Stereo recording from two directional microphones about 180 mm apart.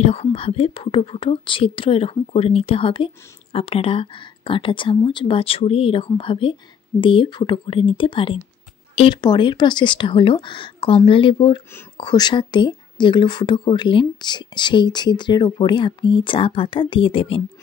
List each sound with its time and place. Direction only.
0.0 s speech: 35° left (ahead or behind)